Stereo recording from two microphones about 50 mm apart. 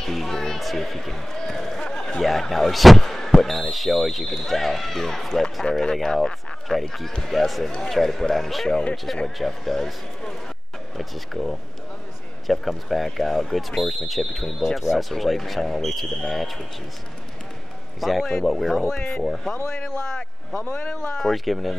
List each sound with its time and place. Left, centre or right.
0.0 s speech: centre
2.2 s a man's voice: centre
11.0 s speech: centre
18.0 s speech: centre
18.8 s a man's voice: centre
19.7 s a man's voice: centre
20.6 s a man's voice: left
20.9 s a man's voice: centre
21.3 s speech: centre